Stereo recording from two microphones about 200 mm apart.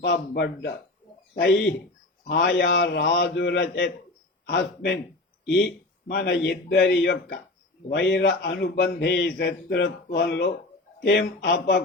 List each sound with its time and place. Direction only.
0.0 s a man's voice: 55° left (ahead or behind)